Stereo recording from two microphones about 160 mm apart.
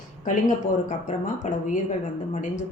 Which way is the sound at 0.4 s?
50° left (ahead or behind).